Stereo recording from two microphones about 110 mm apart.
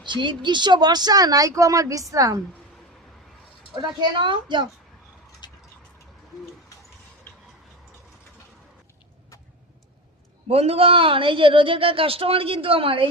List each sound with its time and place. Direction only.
0.0 s speech: 45° right (ahead or behind)
3.8 s a woman's voice: 45° right (ahead or behind)
5.4 s a sound: 40° left (ahead or behind)
10.5 s speech: 65° right (ahead or behind)